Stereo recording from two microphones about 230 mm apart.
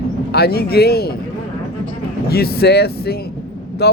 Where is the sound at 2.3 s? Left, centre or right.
Left.